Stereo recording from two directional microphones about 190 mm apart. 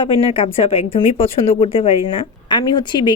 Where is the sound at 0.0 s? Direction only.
30° left (ahead or behind).